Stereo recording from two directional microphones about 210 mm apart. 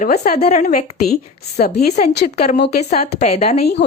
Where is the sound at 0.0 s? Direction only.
45° left (ahead or behind).